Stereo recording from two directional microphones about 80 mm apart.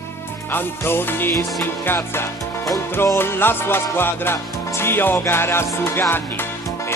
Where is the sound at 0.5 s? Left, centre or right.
Left.